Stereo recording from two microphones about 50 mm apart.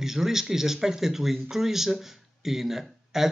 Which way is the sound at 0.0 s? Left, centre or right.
Centre.